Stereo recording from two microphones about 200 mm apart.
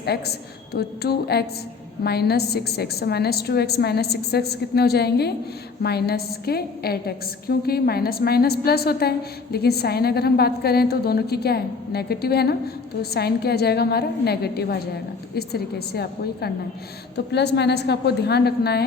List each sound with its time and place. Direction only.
0.0 s a woman's voice: 55° left (ahead or behind)